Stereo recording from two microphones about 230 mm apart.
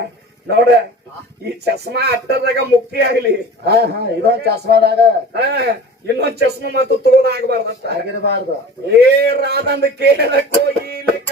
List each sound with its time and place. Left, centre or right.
0.4 s speech: right
10.8 s music: right